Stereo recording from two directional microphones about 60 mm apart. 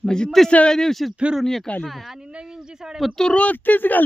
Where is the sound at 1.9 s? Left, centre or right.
Centre.